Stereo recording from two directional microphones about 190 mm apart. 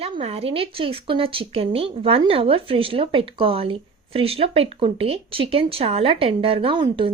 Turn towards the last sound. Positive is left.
turn(degrees=-25)  # may be behind; listen again after turning